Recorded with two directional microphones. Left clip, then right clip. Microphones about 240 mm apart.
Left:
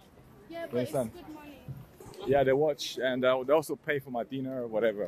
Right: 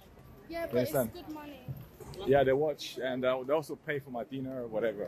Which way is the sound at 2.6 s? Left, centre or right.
Left.